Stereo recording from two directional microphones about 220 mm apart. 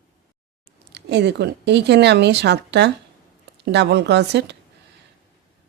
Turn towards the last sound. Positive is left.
turn(degrees=-50)  # may be behind; listen again after turning